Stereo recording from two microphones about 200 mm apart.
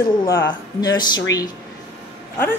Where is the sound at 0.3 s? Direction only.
15° left (ahead or behind).